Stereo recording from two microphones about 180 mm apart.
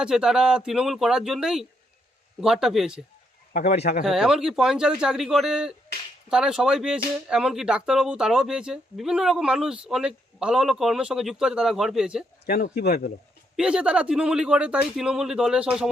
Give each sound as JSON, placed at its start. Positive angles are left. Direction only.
{"t": 0.0, "sound": "speech", "side_deg": -5}
{"t": 3.5, "sound": "speech", "side_deg": 50}
{"t": 4.0, "sound": "speech", "side_deg": 0}
{"t": 12.5, "sound": "speech", "side_deg": 50}
{"t": 13.6, "sound": "speech", "side_deg": -5}